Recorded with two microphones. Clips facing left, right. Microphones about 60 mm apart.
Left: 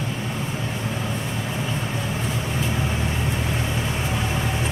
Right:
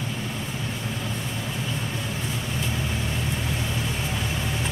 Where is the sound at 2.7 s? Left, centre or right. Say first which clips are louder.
Left 3 dB; left.